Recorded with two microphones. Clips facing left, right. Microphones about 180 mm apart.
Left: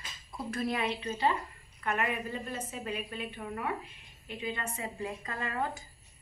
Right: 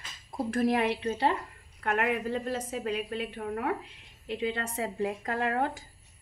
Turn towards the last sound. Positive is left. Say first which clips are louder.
# right 6 dB
turn(degrees=-70)  # may be behind; listen again after turning